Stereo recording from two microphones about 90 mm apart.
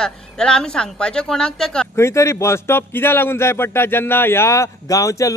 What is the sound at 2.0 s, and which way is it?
Speech, 30° left (ahead or behind).